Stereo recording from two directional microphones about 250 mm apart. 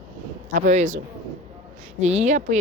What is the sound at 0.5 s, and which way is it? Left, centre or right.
Speech, right.